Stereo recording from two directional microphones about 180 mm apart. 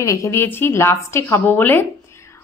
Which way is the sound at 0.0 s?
15° left (ahead or behind).